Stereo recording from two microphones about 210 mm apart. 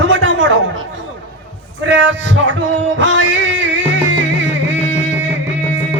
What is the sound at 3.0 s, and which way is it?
Music, 65° right (ahead or behind).